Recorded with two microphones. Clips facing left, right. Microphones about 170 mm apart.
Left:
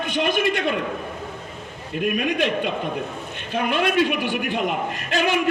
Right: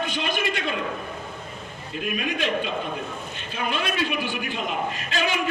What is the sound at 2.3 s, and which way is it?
A man's voice, 60° left (ahead or behind).